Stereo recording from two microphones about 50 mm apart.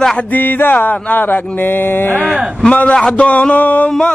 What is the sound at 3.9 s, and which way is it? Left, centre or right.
Speech, centre.